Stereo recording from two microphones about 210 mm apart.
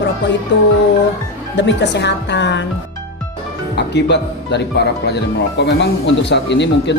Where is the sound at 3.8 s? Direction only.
55° left (ahead or behind).